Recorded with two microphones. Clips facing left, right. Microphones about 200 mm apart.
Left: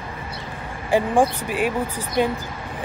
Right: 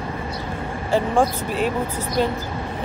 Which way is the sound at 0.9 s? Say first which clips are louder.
Left 1 dB; 15° left (ahead or behind).